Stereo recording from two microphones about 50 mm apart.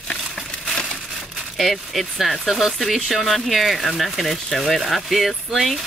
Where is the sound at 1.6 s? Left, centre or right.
Centre.